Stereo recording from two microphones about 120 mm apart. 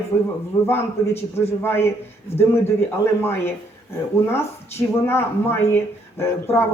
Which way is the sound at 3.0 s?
20° left (ahead or behind).